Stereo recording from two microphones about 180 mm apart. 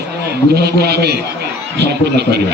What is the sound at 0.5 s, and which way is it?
A man's voice, 65° right (ahead or behind).